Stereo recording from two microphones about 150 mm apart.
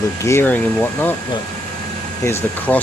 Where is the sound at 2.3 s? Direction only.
15° left (ahead or behind).